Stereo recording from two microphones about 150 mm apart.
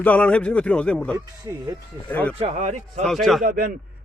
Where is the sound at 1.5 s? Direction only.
25° right (ahead or behind).